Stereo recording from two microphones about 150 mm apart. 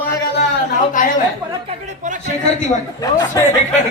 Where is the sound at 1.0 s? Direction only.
60° left (ahead or behind).